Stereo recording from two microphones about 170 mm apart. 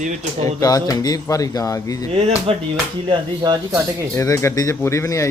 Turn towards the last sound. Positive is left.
turn(degrees=20)  # may be behind; listen again after turning